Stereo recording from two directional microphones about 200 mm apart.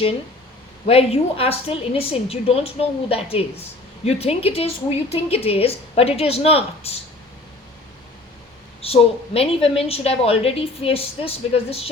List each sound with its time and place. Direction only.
0.9 s a woman's voice: 30° left (ahead or behind)
8.8 s a woman's voice: 30° left (ahead or behind)